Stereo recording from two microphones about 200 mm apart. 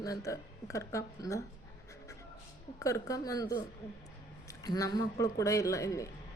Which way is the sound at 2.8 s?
15° left (ahead or behind).